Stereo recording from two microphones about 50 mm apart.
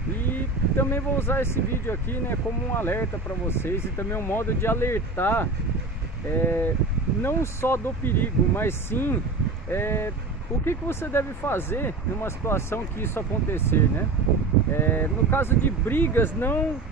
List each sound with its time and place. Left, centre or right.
0.2 s speech: left
7.2 s speech: left